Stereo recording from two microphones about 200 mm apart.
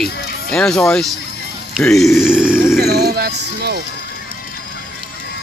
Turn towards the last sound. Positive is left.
turn(degrees=-50)  # may be behind; listen again after turning